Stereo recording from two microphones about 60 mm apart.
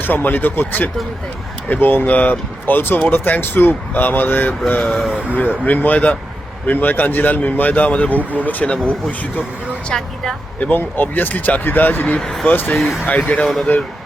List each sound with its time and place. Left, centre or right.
0.0 s speech: left
4.8 s speech: centre
5.6 s speech: left
8.2 s speech: right
8.4 s speech: left
9.9 s speech: centre
10.6 s speech: left
12.1 s speech: centre
12.5 s speech: left
12.7 s speech: centre
13.1 s speech: left
13.7 s speech: left